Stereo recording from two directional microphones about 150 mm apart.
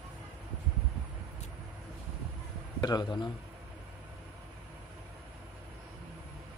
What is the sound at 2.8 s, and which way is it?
Speech, 30° left (ahead or behind).